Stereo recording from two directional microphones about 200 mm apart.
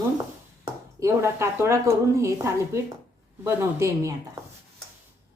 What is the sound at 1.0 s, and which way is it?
A woman's voice, 15° right (ahead or behind).